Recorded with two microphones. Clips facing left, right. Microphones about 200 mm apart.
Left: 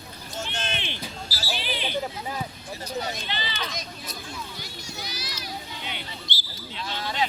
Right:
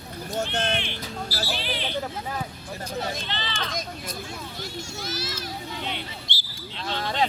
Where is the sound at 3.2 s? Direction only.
10° left (ahead or behind).